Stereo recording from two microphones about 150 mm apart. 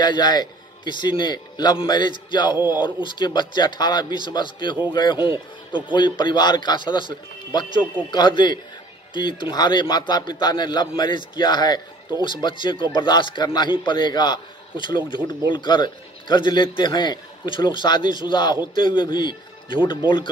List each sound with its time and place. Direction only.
0.0 s a man's voice: 30° left (ahead or behind)